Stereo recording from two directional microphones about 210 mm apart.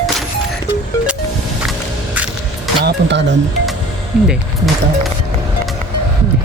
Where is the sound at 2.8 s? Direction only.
55° right (ahead or behind).